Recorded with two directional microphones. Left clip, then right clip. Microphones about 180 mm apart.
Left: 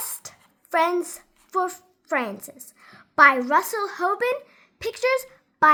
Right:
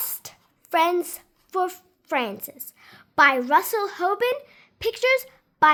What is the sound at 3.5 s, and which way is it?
A woman's voice, 55° right (ahead or behind).